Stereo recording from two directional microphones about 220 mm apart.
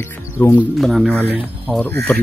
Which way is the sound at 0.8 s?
Centre (ahead or behind).